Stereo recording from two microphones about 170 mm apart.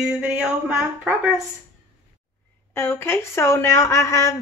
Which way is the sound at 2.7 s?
15° left (ahead or behind).